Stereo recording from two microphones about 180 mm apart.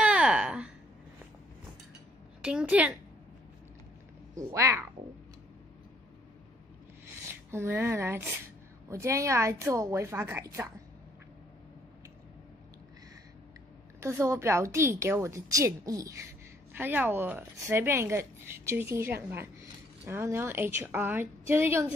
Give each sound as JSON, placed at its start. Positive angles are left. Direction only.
{"t": 0.0, "sound": "a sound", "side_deg": -5}
{"t": 2.4, "sound": "a woman's voice", "side_deg": -5}
{"t": 4.4, "sound": "a woman's voice", "side_deg": -15}
{"t": 7.5, "sound": "a woman's voice", "side_deg": -10}
{"t": 13.9, "sound": "a woman's voice", "side_deg": -15}